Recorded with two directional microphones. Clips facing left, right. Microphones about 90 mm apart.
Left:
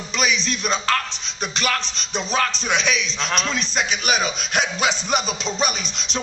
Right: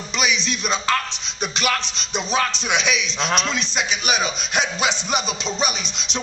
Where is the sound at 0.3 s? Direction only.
40° left (ahead or behind).